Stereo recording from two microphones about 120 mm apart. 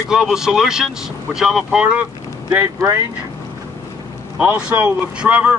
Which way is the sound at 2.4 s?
25° right (ahead or behind).